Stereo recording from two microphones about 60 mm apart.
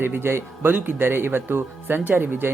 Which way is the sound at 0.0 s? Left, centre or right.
Right.